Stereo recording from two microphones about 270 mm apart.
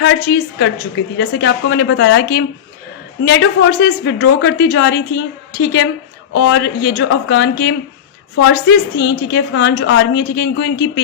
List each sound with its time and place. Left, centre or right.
0.0 s speech: left
9.0 s speech: left